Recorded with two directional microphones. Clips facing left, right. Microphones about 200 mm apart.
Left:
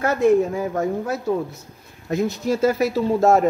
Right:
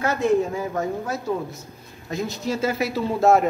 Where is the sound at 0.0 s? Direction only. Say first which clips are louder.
Left 4 dB; 55° left (ahead or behind).